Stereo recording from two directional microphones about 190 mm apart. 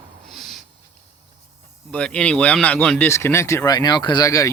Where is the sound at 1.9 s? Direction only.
5° left (ahead or behind).